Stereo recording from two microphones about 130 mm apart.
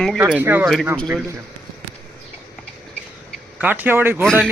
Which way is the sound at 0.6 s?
Centre (ahead or behind).